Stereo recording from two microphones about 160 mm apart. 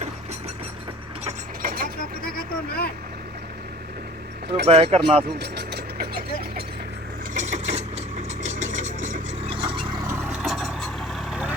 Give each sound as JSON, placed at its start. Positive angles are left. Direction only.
{"t": 1.6, "sound": "vehicle", "side_deg": -70}
{"t": 2.0, "sound": "vehicle", "side_deg": 65}
{"t": 4.6, "sound": "speech", "side_deg": -40}
{"t": 5.4, "sound": "mechanisms", "side_deg": -90}
{"t": 7.3, "sound": "mechanisms", "side_deg": -45}
{"t": 8.5, "sound": "a sound", "side_deg": -50}
{"t": 9.5, "sound": "a sound", "side_deg": -30}
{"t": 10.1, "sound": "vehicle", "side_deg": -10}